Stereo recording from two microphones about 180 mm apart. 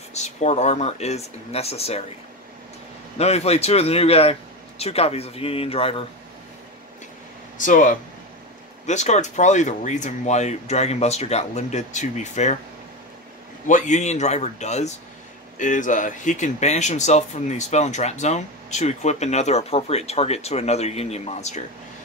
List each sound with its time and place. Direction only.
0.1 s speech: 40° left (ahead or behind)
3.2 s speech: 35° left (ahead or behind)
7.5 s speech: 45° left (ahead or behind)
13.7 s speech: 45° left (ahead or behind)